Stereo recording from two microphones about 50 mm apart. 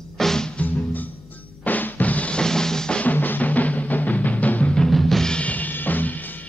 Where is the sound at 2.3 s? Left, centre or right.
Centre.